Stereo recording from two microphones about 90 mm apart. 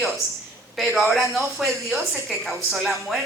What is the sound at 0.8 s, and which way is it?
A woman's voice, 5° right (ahead or behind).